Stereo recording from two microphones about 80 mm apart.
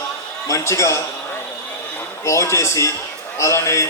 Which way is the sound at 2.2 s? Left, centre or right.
Left.